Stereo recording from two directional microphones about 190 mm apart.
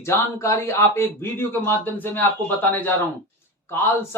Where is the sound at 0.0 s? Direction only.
15° left (ahead or behind).